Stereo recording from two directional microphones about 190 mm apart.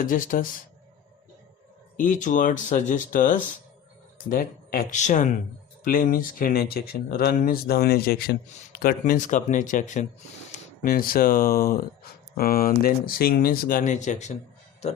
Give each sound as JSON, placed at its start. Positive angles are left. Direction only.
{"t": 0.0, "sound": "speech", "side_deg": 45}
{"t": 2.0, "sound": "speech", "side_deg": 40}